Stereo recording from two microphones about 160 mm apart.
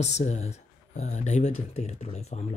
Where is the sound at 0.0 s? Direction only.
45° left (ahead or behind).